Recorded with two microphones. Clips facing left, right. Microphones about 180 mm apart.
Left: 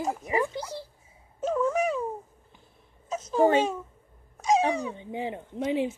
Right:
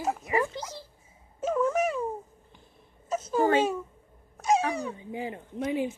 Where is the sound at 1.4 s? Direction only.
Centre (ahead or behind).